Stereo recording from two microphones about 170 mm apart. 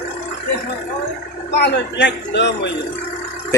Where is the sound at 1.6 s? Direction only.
75° left (ahead or behind); by 2.7 s 90° left.